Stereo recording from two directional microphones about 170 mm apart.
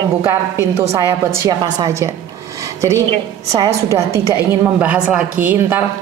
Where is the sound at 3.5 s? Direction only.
20° right (ahead or behind).